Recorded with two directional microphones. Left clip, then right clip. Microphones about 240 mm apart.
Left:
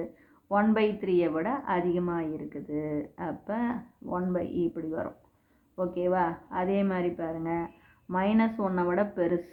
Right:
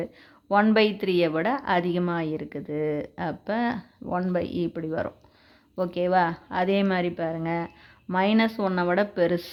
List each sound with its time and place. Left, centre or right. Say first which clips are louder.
0.0 s a woman's voice: right 4 dB; right